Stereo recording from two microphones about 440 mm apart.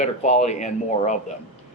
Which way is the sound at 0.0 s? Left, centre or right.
Centre.